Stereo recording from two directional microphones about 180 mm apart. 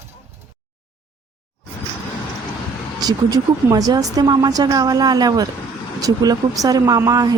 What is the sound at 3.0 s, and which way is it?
A woman's voice, 20° right (ahead or behind).